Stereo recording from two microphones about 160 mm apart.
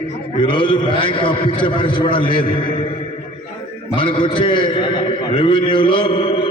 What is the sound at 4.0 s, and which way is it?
A man's voice, 30° left (ahead or behind).